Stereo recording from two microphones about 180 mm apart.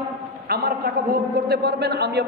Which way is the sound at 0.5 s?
60° right (ahead or behind).